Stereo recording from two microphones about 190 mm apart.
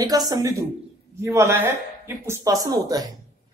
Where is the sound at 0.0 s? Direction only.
20° right (ahead or behind).